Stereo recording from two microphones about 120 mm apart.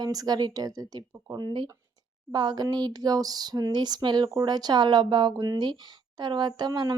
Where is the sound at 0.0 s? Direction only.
35° right (ahead or behind).